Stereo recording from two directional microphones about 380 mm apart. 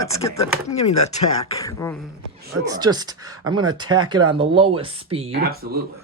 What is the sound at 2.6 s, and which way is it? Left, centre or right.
Speech, centre.